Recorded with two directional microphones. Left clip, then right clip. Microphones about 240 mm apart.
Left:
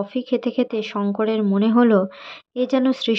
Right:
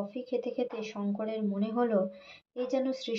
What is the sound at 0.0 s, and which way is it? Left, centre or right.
Speech, left.